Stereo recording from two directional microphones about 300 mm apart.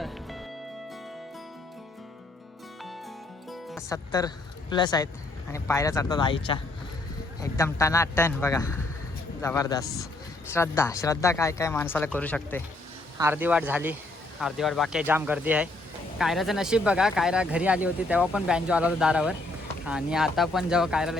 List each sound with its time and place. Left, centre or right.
0.0 s music: centre
3.5 s music: centre
3.8 s speech: centre
13.1 s speech: centre